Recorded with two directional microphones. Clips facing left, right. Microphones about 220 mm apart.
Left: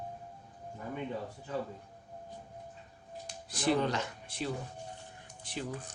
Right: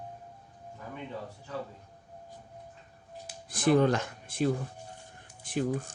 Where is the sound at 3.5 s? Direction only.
50° right (ahead or behind).